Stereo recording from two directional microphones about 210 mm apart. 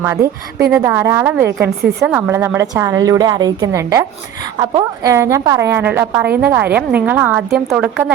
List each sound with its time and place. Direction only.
0.0 s a woman's voice: 10° right (ahead or behind)